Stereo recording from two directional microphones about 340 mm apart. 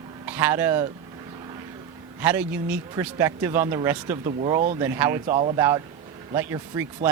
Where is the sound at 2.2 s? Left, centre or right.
Centre.